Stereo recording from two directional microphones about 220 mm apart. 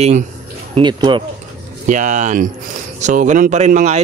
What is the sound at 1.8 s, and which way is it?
Speech, 35° right (ahead or behind).